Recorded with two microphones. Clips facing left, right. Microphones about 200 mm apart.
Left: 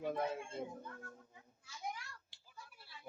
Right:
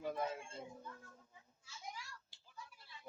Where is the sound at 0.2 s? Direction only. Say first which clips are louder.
Left 3 dB; 60° left (ahead or behind).